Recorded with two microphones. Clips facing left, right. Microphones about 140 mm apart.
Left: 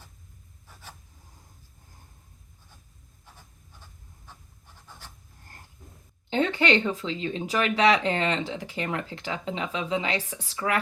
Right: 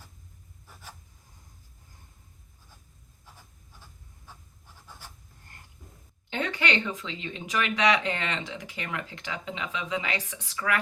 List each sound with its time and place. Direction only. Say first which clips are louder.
6.3 s speech: left 6 dB; 30° left (ahead or behind)